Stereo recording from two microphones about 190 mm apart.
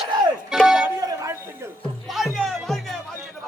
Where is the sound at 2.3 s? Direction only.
Centre (ahead or behind).